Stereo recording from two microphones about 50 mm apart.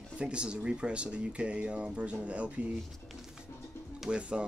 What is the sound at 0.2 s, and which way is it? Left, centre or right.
Speech, right.